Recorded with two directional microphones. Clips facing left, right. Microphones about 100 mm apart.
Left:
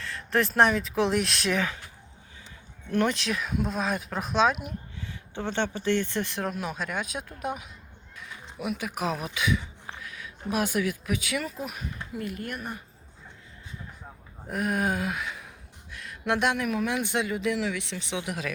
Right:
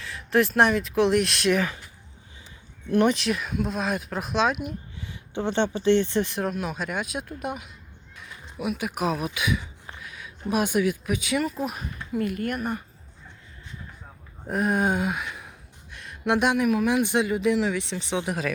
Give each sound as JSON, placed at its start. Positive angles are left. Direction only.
{"t": 0.0, "sound": "speech", "side_deg": -10}
{"t": 2.9, "sound": "speech", "side_deg": -15}
{"t": 3.2, "sound": "speech", "side_deg": -5}
{"t": 5.3, "sound": "speech", "side_deg": -20}
{"t": 6.4, "sound": "speech", "side_deg": -5}
{"t": 8.8, "sound": "speech", "side_deg": -15}
{"t": 11.5, "sound": "speech", "side_deg": -35}
{"t": 12.1, "sound": "speech", "side_deg": -60}
{"t": 14.5, "sound": "speech", "side_deg": -30}
{"t": 15.9, "sound": "a sound", "side_deg": -20}
{"t": 16.6, "sound": "speech", "side_deg": -15}